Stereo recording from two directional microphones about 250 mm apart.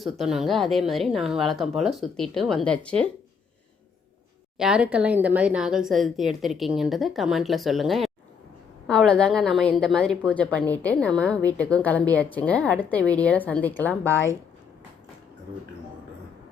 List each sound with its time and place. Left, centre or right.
0.0 s a woman's voice: centre
4.5 s a woman's voice: centre